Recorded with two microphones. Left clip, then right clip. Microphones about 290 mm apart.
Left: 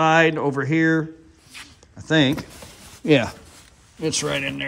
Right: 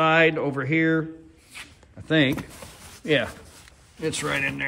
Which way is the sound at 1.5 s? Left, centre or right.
Centre.